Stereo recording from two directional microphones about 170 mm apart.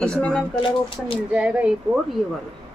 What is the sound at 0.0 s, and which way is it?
Speech, 5° left (ahead or behind).